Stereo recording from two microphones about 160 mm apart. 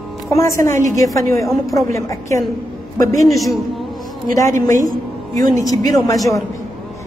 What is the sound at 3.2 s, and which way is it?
Speech, centre (ahead or behind).